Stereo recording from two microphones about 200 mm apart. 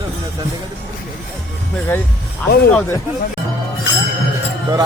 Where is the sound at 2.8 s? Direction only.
15° left (ahead or behind).